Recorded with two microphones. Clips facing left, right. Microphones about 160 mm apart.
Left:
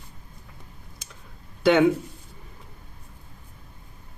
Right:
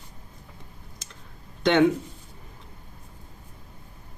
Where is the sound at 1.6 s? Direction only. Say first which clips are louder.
Left 1 dB; 5° left (ahead or behind).